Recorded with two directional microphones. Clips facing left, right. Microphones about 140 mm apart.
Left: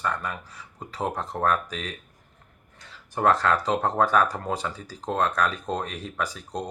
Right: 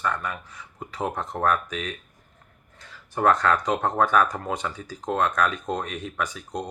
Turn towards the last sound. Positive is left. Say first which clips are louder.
# right 1 dB
turn(degrees=35)  # may be behind; listen again after turning